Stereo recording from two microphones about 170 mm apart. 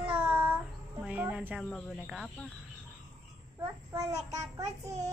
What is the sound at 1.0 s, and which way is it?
Music, 10° right (ahead or behind).